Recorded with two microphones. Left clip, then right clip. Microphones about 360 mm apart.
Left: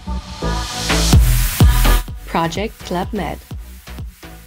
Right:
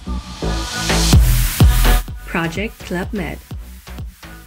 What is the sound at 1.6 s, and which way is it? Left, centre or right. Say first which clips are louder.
Music: even; centre.